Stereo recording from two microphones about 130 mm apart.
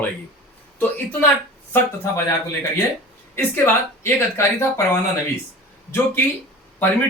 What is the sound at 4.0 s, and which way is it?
Speech, 20° left (ahead or behind).